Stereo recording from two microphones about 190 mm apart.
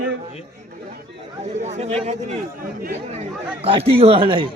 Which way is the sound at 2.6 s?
50° right (ahead or behind).